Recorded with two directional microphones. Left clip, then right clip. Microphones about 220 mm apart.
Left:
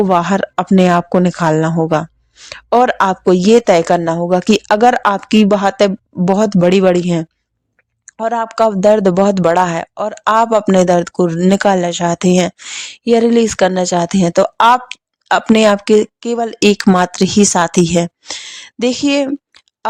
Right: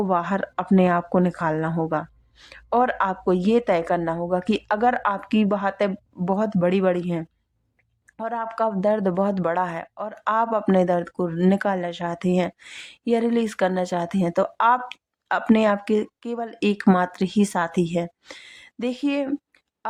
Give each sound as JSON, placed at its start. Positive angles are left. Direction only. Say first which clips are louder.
{"t": 0.0, "sound": "speech", "louder": "left 10 dB", "side_deg": 40}